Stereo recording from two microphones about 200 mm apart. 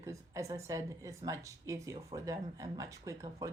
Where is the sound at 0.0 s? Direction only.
15° right (ahead or behind).